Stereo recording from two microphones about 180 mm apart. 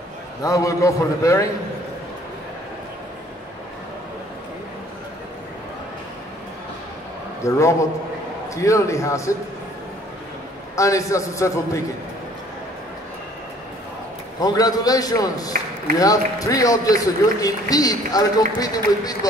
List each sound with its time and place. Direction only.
0.4 s a man's voice: 20° left (ahead or behind)
7.4 s a man's voice: 15° left (ahead or behind)
10.8 s a man's voice: 15° left (ahead or behind)
14.4 s speech: 20° left (ahead or behind)